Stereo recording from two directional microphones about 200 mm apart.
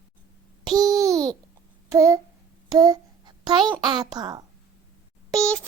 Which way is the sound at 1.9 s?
15° right (ahead or behind).